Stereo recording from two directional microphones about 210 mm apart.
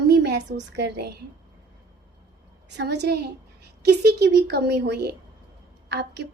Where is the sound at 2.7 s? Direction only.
50° right (ahead or behind).